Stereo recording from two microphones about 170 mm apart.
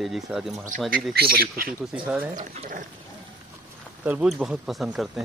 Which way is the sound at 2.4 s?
50° right (ahead or behind).